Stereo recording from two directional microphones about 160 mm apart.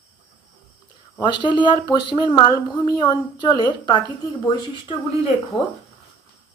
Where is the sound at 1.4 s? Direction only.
30° left (ahead or behind).